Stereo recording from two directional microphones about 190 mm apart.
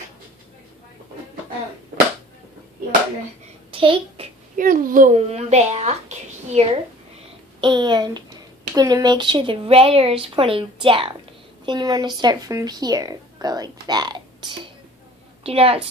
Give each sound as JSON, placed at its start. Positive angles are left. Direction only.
{"t": 3.7, "sound": "a sound", "side_deg": -25}
{"t": 4.5, "sound": "a woman's voice", "side_deg": -45}
{"t": 7.6, "sound": "a woman's voice", "side_deg": -25}